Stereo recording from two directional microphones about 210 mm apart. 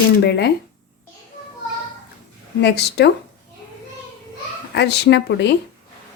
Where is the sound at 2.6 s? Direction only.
50° left (ahead or behind).